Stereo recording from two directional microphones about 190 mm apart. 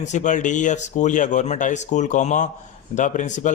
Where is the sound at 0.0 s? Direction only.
40° left (ahead or behind).